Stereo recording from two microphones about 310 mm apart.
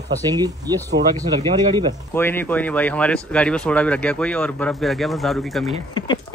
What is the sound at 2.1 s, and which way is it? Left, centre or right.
Speech, centre.